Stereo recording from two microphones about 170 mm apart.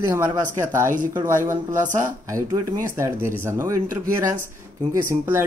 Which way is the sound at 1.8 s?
50° right (ahead or behind).